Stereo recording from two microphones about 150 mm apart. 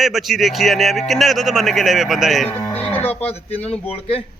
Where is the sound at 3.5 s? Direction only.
45° left (ahead or behind).